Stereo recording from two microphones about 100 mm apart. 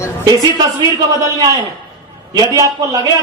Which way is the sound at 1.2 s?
35° right (ahead or behind).